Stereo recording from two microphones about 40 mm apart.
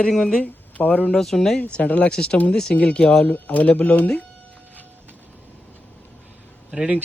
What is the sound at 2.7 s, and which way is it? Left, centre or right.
Speech, left.